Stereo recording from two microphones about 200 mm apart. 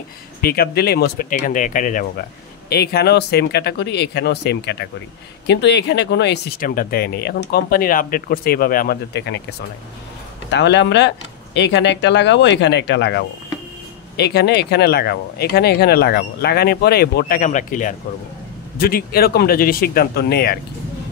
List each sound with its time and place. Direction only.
0.4 s speech: 50° left (ahead or behind)
2.7 s speech: 50° left (ahead or behind)